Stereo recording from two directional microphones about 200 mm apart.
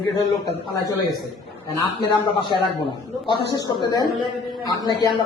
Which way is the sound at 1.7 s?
20° left (ahead or behind).